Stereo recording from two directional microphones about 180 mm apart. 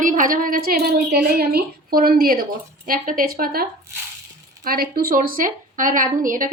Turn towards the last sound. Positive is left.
turn(degrees=-50)  # may be behind; listen again after turning